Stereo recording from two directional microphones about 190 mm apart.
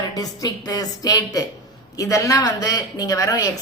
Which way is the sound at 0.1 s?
20° left (ahead or behind).